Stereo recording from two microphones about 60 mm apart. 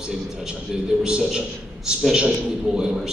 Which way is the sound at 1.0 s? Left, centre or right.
Centre.